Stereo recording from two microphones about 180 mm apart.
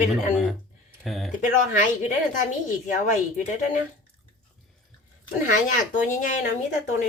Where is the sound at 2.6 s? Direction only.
45° left (ahead or behind).